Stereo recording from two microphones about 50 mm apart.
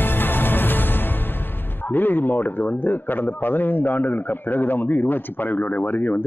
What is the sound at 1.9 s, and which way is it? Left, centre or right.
A man's voice, left.